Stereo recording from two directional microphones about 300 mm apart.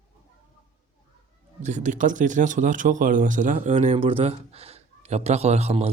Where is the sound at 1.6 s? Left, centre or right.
Right.